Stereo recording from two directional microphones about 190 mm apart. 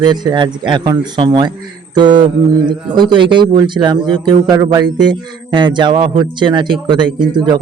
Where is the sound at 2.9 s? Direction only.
25° right (ahead or behind).